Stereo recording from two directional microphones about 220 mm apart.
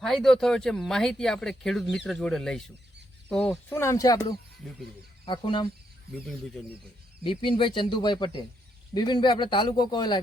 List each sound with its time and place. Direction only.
0.0 s speech: centre (ahead or behind)
4.6 s speech: centre (ahead or behind)
5.2 s speech: 20° left (ahead or behind)
6.1 s speech: centre (ahead or behind)
7.3 s speech: 25° left (ahead or behind)